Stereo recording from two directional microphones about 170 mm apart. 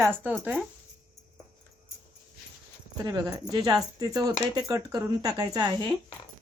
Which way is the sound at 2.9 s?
25° right (ahead or behind).